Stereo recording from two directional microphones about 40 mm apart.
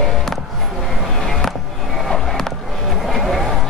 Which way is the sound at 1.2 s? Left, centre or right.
Centre.